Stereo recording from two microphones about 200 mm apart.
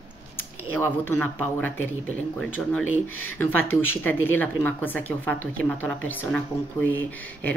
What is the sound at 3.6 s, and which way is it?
Speech, 10° left (ahead or behind).